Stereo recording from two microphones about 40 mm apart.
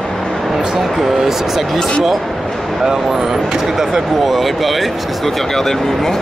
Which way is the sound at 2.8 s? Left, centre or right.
Centre.